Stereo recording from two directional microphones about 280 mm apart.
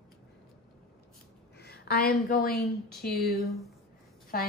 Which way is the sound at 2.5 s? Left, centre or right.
Centre.